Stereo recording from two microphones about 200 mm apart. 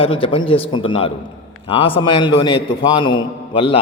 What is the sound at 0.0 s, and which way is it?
A man's voice, 25° left (ahead or behind).